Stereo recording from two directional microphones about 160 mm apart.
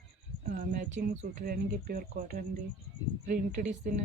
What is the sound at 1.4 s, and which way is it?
Speech, 70° right (ahead or behind).